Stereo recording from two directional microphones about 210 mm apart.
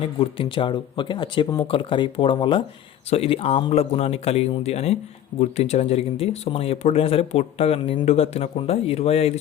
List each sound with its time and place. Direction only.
0.2 s speech: 25° left (ahead or behind)